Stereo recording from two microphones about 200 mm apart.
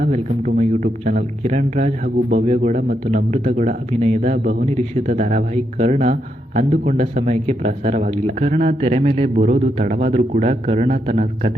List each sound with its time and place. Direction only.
0.0 s speech: 40° right (ahead or behind)